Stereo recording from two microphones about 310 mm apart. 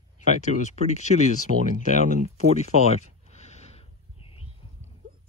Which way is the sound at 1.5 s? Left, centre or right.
Right.